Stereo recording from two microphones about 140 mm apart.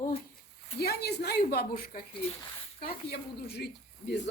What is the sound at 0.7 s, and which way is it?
Speech, 50° left (ahead or behind).